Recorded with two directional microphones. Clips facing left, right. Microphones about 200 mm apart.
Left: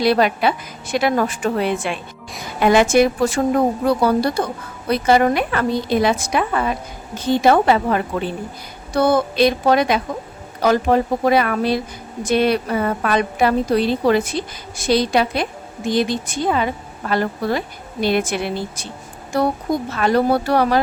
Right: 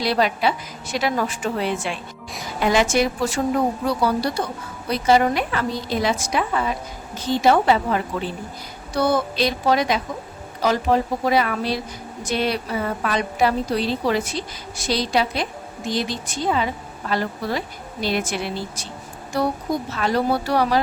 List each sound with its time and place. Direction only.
0.0 s a woman's voice: 55° left (ahead or behind)
20.0 s a woman's voice: 55° left (ahead or behind)